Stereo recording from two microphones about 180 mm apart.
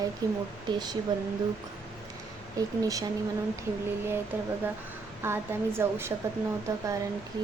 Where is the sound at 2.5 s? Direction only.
20° right (ahead or behind).